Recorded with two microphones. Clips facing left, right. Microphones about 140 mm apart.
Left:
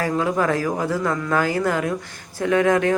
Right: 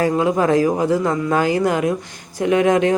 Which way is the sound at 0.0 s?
20° right (ahead or behind).